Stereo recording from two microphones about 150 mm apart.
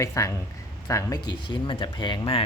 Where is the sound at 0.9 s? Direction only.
20° left (ahead or behind).